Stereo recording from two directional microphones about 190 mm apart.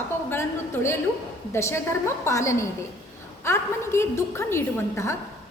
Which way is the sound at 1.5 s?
15° left (ahead or behind).